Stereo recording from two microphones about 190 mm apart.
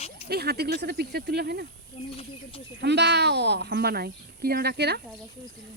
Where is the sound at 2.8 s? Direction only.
65° right (ahead or behind).